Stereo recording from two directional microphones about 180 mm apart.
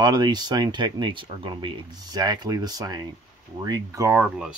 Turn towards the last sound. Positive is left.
turn(degrees=-5)  # may be behind; listen again after turning